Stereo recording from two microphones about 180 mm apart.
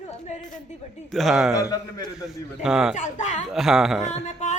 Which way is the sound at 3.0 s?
40° left (ahead or behind).